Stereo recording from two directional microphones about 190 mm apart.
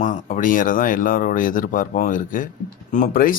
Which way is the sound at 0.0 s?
45° left (ahead or behind).